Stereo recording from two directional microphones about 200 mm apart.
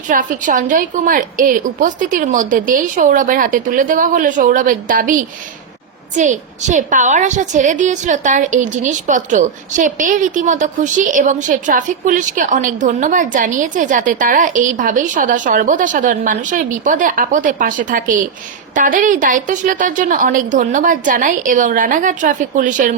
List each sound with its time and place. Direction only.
0.1 s a woman's voice: 40° right (ahead or behind)